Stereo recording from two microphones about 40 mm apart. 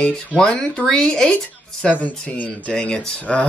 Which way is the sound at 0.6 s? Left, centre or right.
Left.